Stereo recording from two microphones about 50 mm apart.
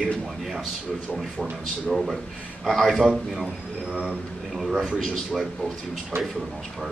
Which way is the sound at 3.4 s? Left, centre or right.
Centre.